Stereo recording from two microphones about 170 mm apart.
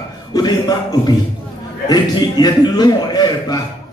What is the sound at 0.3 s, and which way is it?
A man's voice, 25° left (ahead or behind).